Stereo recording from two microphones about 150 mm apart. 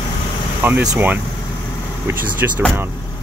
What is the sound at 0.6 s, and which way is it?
Speech, 10° right (ahead or behind).